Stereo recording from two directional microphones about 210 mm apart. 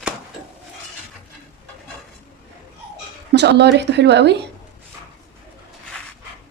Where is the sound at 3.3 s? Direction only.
55° right (ahead or behind).